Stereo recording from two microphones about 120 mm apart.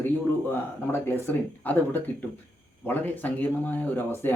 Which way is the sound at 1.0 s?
15° left (ahead or behind).